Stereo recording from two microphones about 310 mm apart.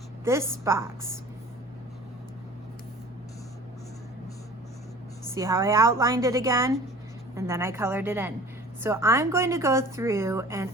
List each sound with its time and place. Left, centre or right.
0.6 s a woman's voice: centre
5.3 s a woman's voice: centre